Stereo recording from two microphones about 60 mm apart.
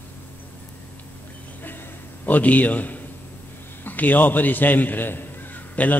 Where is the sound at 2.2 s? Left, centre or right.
Left.